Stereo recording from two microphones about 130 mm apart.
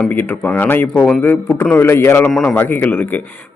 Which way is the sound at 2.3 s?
5° left (ahead or behind).